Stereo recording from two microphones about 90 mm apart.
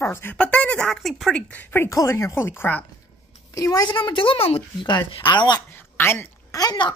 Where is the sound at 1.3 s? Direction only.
20° left (ahead or behind).